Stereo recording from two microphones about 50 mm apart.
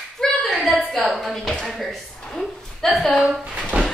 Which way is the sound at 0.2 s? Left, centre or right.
Centre.